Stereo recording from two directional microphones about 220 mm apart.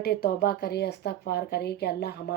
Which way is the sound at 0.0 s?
45° left (ahead or behind).